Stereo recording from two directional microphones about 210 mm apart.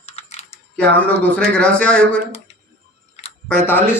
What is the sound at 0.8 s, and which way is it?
A man's voice, 5° left (ahead or behind).